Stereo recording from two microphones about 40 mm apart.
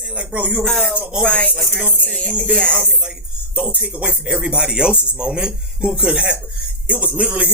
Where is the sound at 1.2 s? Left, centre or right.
Left.